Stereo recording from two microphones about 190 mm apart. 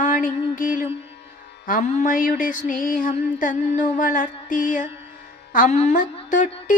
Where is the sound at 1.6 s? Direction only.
45° left (ahead or behind).